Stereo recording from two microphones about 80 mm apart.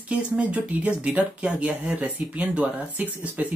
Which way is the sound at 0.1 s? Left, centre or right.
Centre.